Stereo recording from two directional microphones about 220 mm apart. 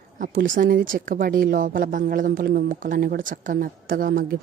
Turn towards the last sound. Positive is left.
turn(degrees=-40)  # may be behind; listen again after turning